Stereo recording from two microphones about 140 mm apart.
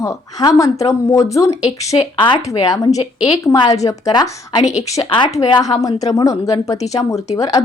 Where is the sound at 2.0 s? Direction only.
35° left (ahead or behind).